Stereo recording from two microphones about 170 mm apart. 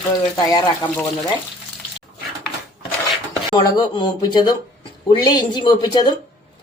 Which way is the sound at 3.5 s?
25° left (ahead or behind).